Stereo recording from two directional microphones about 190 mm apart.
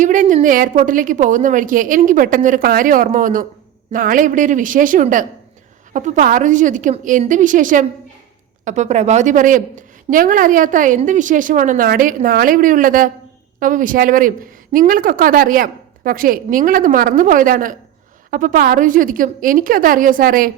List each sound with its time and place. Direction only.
0.0 s a woman's voice: 40° right (ahead or behind)